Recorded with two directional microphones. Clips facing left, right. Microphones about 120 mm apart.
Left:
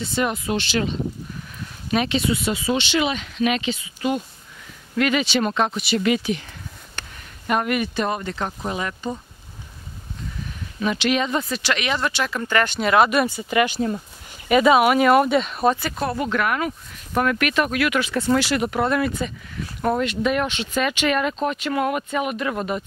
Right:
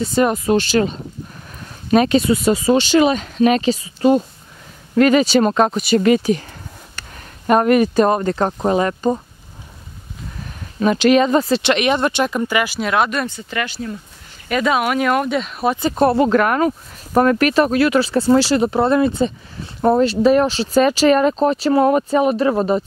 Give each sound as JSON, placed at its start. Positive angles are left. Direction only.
{"t": 0.0, "sound": "speech", "side_deg": -40}
{"t": 7.4, "sound": "speech", "side_deg": -40}
{"t": 10.8, "sound": "speech", "side_deg": -40}
{"t": 11.6, "sound": "speech", "side_deg": -20}
{"t": 15.8, "sound": "speech", "side_deg": -30}